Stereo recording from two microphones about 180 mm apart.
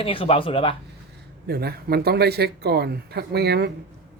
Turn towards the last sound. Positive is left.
turn(degrees=-65)  # may be behind; listen again after turning